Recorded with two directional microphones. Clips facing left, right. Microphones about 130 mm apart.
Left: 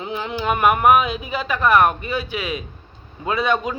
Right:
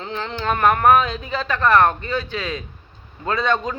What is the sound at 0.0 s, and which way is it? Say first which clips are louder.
Speech: left 1 dB; 10° left (ahead or behind).